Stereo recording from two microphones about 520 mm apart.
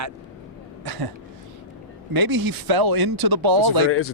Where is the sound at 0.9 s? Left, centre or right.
Right.